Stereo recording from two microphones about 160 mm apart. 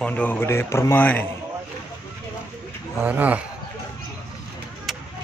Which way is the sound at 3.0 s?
10° right (ahead or behind).